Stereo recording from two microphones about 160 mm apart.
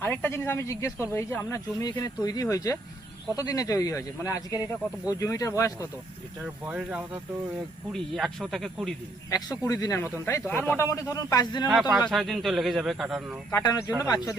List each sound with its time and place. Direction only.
0.0 s speech: 10° left (ahead or behind)
6.4 s a man's voice: 5° right (ahead or behind)
9.3 s speech: 20° left (ahead or behind)
12.0 s a man's voice: centre (ahead or behind)
13.5 s speech: 20° left (ahead or behind)